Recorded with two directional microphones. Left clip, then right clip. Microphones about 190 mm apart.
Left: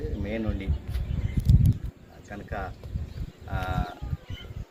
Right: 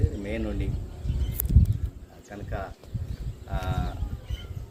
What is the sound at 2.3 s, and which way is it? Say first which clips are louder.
Speech: left 1 dB; 10° right (ahead or behind).